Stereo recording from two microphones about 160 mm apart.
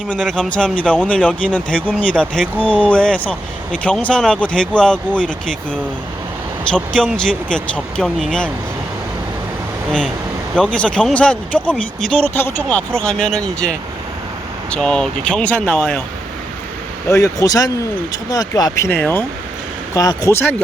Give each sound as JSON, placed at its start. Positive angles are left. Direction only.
{"t": 0.1, "sound": "speech", "side_deg": 5}
{"t": 6.7, "sound": "speech", "side_deg": 5}
{"t": 10.5, "sound": "speech", "side_deg": 5}
{"t": 17.1, "sound": "speech", "side_deg": 20}